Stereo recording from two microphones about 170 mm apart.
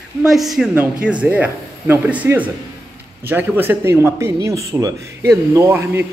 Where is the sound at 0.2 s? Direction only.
Centre (ahead or behind).